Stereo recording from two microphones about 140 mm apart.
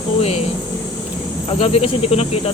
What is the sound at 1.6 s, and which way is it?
Speech, 45° left (ahead or behind).